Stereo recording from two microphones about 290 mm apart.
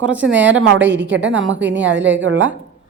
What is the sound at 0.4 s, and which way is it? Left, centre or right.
A woman's voice, right.